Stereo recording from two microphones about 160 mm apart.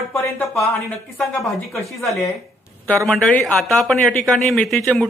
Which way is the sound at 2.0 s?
Centre (ahead or behind).